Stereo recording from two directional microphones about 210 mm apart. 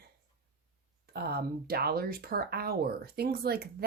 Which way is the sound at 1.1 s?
50° right (ahead or behind).